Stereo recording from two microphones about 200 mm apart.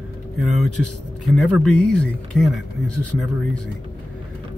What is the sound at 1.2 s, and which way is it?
Speech, 5° left (ahead or behind).